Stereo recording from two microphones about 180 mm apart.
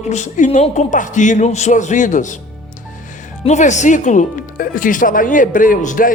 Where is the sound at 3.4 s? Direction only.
40° left (ahead or behind).